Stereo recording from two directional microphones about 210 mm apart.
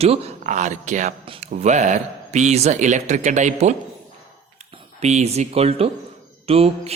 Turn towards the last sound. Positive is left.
turn(degrees=-30)  # may be behind; listen again after turning